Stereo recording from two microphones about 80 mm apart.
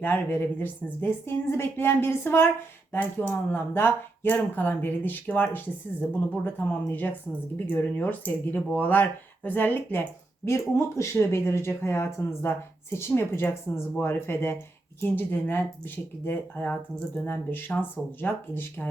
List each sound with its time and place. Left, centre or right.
0.0 s speech: left
10.4 s speech: left